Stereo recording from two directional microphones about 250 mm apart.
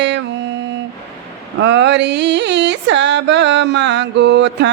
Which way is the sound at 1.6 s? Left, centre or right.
Right.